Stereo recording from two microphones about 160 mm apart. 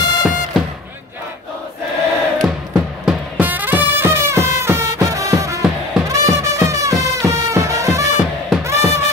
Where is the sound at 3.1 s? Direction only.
10° right (ahead or behind).